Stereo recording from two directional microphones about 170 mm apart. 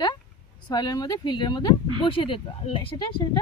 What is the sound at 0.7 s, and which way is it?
Speech, 20° left (ahead or behind).